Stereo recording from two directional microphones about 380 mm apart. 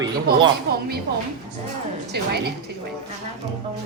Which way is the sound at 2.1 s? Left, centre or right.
Right.